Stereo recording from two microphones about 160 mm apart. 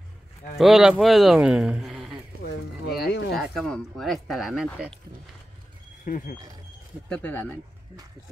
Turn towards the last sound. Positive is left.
turn(degrees=10)  # may be behind; listen again after turning